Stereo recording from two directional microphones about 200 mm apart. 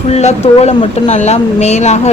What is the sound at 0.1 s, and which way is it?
Speech, 30° left (ahead or behind).